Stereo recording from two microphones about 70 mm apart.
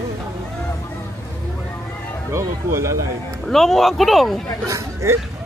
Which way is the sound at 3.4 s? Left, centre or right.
Centre.